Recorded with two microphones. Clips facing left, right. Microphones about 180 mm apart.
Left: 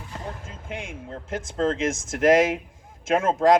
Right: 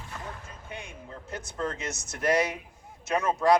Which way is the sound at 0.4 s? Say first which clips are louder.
Left 6 dB; 90° left.